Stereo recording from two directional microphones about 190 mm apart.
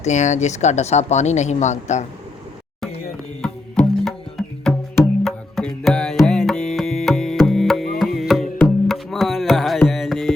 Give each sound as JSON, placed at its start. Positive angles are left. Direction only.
{"t": 0.0, "sound": "speech", "side_deg": 40}
{"t": 3.4, "sound": "music", "side_deg": 0}
{"t": 8.5, "sound": "tabla", "side_deg": 0}